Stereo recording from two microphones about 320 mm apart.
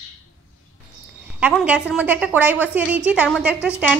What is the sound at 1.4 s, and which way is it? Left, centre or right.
A woman's voice, centre.